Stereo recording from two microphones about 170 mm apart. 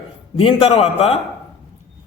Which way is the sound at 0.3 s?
30° left (ahead or behind).